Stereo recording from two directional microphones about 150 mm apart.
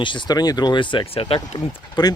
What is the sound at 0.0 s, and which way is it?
Speech, 30° left (ahead or behind).